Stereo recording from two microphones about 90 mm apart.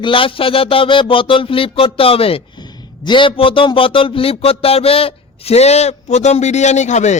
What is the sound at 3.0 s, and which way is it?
A man's voice, 65° left (ahead or behind).